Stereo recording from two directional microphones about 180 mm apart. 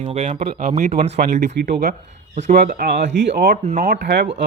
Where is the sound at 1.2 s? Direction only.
55° right (ahead or behind).